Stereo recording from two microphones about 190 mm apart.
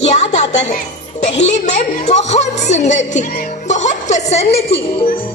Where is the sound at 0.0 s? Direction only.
35° left (ahead or behind).